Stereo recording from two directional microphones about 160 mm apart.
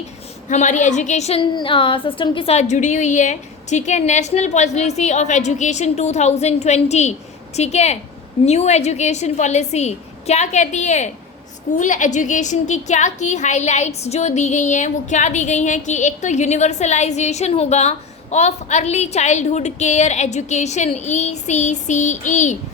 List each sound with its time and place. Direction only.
0.4 s a woman's voice: 50° left (ahead or behind)
1.4 s a woman's voice: 30° left (ahead or behind); by 22.5 s 50° left (ahead or behind)